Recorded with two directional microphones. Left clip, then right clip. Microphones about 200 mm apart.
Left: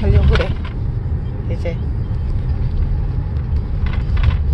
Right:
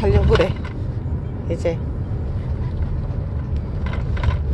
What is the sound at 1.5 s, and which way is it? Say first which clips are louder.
Vehicle: right 5 dB; 25° right (ahead or behind).